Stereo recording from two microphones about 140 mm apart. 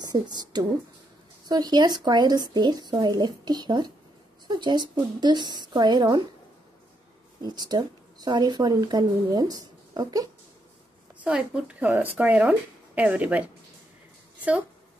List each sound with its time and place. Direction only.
0.0 s speech: 30° right (ahead or behind)
7.4 s speech: 30° right (ahead or behind)
11.2 s speech: 5° right (ahead or behind)